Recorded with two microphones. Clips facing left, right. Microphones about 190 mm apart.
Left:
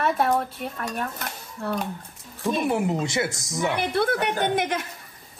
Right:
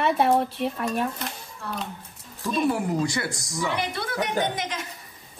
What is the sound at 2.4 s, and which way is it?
Speech, 25° left (ahead or behind).